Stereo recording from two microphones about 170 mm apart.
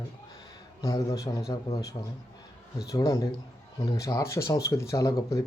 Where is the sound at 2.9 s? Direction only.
20° left (ahead or behind).